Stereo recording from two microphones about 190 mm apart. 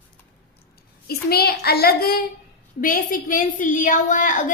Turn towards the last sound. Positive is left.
turn(degrees=45)  # may be behind; listen again after turning